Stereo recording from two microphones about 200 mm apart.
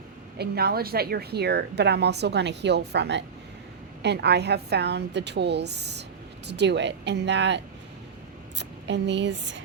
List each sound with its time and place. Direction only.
0.3 s a woman's voice: 50° right (ahead or behind)